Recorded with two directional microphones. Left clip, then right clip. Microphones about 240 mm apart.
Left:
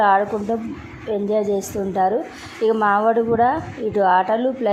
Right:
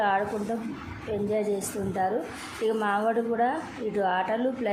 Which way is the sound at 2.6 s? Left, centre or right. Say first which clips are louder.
Left 9 dB; centre.